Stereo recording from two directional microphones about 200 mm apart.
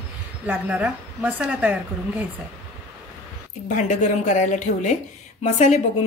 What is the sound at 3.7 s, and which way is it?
Speech, 35° left (ahead or behind).